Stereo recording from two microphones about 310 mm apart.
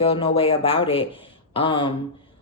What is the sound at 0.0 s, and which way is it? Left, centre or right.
A woman's voice, centre.